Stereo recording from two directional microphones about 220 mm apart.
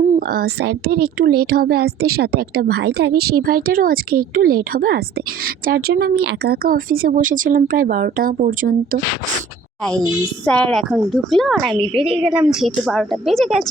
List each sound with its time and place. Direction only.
0.2 s speech: 45° right (ahead or behind)
10.4 s a woman's voice: 5° left (ahead or behind)
11.9 s a woman's voice: 25° right (ahead or behind)
12.2 s a woman's voice: 5° right (ahead or behind)